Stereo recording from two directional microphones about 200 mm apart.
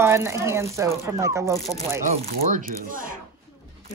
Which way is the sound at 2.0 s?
40° right (ahead or behind).